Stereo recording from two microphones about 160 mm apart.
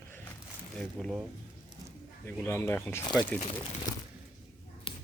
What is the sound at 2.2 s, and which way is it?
Speech, 15° left (ahead or behind).